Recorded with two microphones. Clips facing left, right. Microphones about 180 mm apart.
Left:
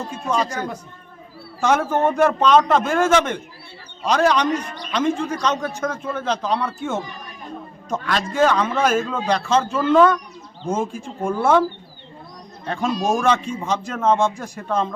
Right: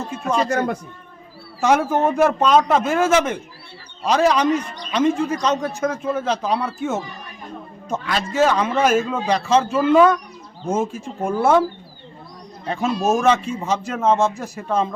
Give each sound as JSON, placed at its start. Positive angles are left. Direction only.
{"t": 0.4, "sound": "a man's voice", "side_deg": -60}
{"t": 1.6, "sound": "a man's voice", "side_deg": -10}
{"t": 12.6, "sound": "a man's voice", "side_deg": -5}